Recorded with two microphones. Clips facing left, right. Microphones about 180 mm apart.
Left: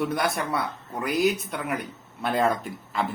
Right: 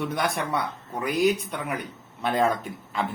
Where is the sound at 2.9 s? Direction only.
Centre (ahead or behind).